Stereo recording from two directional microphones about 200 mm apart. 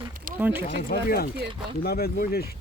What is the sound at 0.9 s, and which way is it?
Speech, 50° left (ahead or behind).